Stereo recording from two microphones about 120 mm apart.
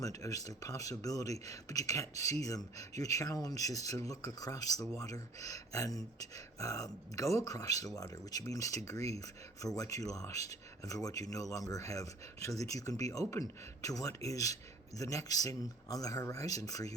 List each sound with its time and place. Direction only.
0.0 s speech: 30° left (ahead or behind)